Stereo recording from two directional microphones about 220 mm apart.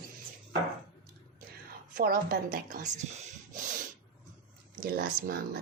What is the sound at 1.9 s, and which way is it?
Speech, 40° right (ahead or behind).